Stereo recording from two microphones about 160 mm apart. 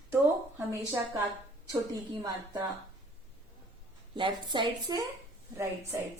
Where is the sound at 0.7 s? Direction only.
15° right (ahead or behind).